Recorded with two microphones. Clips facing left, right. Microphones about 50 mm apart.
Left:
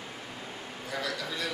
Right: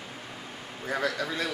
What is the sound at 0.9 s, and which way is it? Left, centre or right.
Speech, right.